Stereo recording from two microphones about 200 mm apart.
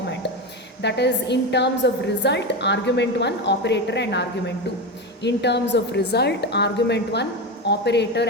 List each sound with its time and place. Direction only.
0.8 s a woman's voice: 60° left (ahead or behind)